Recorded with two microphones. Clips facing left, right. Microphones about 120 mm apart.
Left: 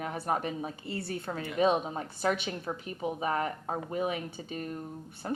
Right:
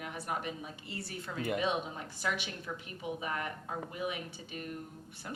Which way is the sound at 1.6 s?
40° left (ahead or behind).